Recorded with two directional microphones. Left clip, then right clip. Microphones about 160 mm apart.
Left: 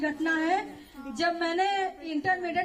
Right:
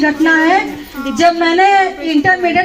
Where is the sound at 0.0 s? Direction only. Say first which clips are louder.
Right 17 dB; 30° right (ahead or behind).